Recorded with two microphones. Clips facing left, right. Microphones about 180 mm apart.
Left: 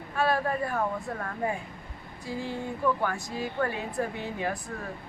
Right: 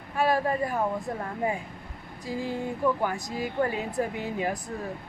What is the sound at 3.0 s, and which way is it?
A woman's voice, 15° right (ahead or behind).